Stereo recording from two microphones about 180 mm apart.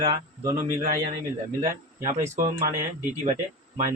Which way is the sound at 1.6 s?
45° right (ahead or behind).